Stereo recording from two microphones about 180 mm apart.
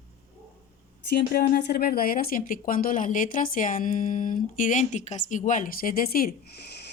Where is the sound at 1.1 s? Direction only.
60° left (ahead or behind).